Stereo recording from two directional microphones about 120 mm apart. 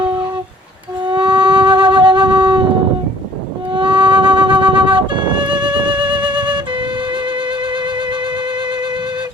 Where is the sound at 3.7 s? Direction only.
40° right (ahead or behind).